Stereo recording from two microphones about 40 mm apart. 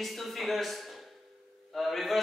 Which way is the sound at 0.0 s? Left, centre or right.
Centre.